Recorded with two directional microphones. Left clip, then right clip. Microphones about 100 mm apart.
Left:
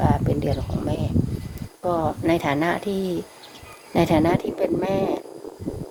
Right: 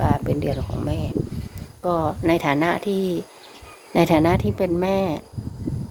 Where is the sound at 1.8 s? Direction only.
40° right (ahead or behind); by 5.2 s 65° right (ahead or behind).